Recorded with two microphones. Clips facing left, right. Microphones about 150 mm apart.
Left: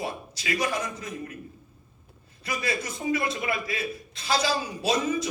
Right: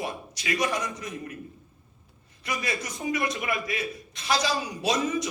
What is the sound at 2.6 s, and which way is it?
A man's voice, 25° left (ahead or behind).